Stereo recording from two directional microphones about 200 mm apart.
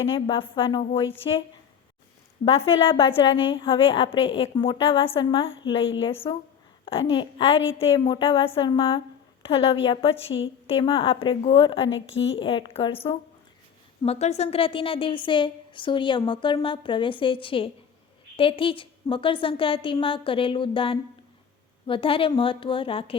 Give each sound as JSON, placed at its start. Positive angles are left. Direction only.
{"t": 0.0, "sound": "a woman's voice", "side_deg": 25}